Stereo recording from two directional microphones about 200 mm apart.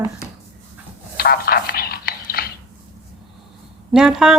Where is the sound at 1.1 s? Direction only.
50° left (ahead or behind).